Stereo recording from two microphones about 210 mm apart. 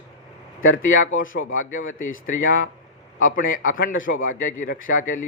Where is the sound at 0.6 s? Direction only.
70° left (ahead or behind).